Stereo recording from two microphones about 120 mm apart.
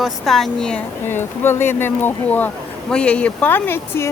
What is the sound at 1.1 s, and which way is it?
Speech, 20° left (ahead or behind).